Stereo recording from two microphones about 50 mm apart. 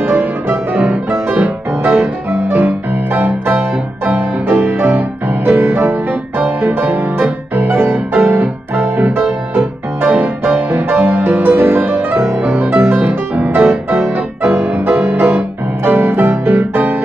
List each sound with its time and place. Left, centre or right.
0.0 s music: right
5.4 s music: right
9.0 s music: right
11.1 s music: right